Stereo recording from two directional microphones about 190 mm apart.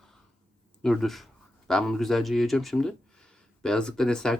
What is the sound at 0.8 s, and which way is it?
Speech, centre (ahead or behind).